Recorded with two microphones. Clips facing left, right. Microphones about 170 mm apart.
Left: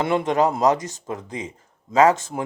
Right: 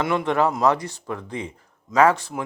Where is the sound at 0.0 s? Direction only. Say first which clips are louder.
Left 1 dB; 25° left (ahead or behind).